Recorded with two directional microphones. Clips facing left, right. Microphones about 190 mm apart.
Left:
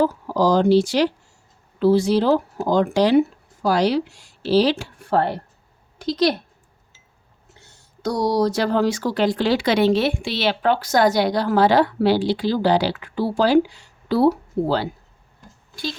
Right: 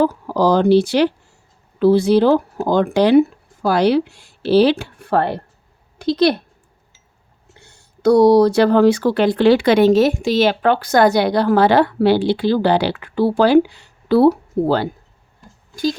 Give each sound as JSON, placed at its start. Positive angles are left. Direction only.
{"t": 0.0, "sound": "speech", "side_deg": -60}
{"t": 8.0, "sound": "speech", "side_deg": -60}
{"t": 15.7, "sound": "speech", "side_deg": -45}